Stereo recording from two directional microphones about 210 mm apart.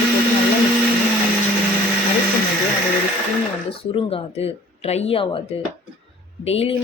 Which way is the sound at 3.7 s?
25° left (ahead or behind).